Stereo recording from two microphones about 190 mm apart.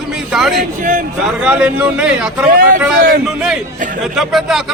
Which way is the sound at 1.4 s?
5° right (ahead or behind).